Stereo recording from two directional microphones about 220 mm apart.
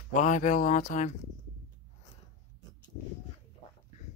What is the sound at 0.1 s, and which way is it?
Speech, 35° left (ahead or behind).